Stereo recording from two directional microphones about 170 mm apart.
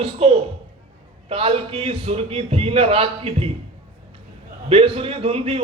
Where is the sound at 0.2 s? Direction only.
35° right (ahead or behind).